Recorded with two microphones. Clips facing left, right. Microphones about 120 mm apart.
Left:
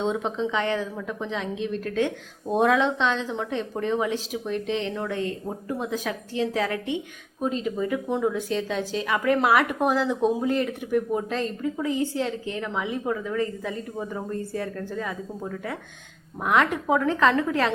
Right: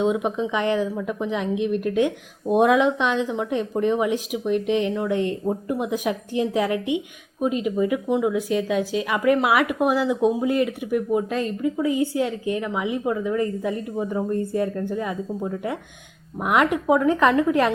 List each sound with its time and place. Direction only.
0.0 s a woman's voice: 10° right (ahead or behind)